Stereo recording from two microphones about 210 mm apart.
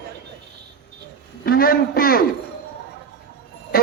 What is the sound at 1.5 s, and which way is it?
Music, 45° left (ahead or behind).